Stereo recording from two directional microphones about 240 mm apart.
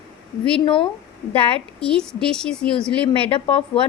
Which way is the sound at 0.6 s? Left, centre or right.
Left.